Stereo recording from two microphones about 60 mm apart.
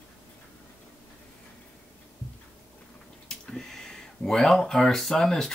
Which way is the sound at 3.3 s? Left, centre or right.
Centre.